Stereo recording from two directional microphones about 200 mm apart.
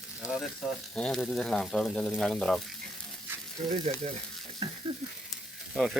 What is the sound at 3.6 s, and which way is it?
Frying, 30° right (ahead or behind).